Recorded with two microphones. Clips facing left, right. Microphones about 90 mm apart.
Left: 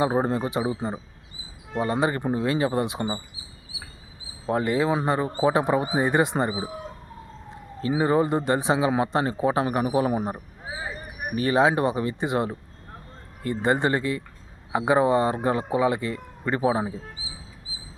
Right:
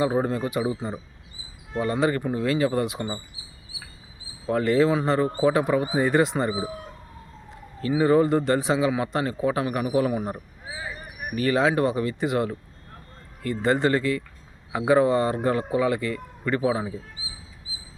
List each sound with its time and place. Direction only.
0.0 s speech: 30° left (ahead or behind)
4.4 s a man's voice: 20° left (ahead or behind)
11.3 s speech: 25° left (ahead or behind)